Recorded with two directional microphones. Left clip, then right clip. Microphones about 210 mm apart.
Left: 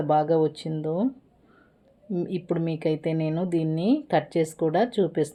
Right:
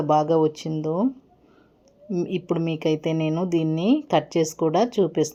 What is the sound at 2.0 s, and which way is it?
Speech, 15° right (ahead or behind).